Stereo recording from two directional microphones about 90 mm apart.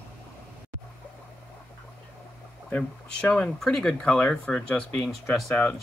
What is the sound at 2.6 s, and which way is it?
Speech, 15° left (ahead or behind).